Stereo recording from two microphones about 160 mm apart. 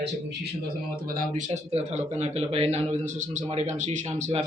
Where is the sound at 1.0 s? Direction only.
55° right (ahead or behind).